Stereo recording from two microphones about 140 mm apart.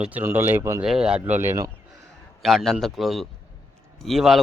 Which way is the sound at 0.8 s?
5° right (ahead or behind).